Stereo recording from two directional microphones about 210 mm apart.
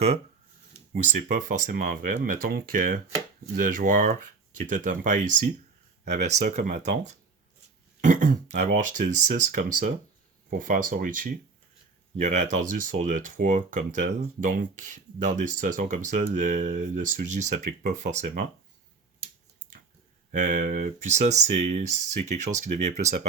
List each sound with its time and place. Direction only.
0.9 s speech: 35° right (ahead or behind)
20.3 s speech: 35° right (ahead or behind)